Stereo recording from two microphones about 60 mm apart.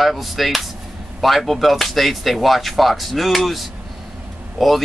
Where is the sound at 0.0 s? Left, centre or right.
Centre.